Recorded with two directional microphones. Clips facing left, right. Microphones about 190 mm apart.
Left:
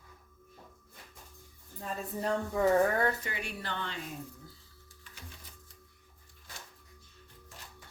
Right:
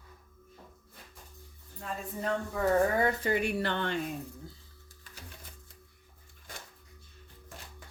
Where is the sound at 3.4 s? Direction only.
65° right (ahead or behind).